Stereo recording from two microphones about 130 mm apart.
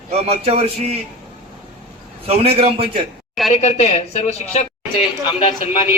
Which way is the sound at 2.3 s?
50° right (ahead or behind).